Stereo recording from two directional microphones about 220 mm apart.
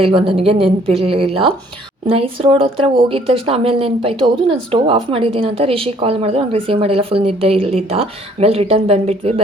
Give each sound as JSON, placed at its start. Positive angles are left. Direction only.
{"t": 0.0, "sound": "speech", "side_deg": -25}